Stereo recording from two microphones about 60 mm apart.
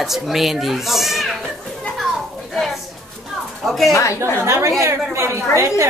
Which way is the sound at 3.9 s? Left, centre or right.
Left.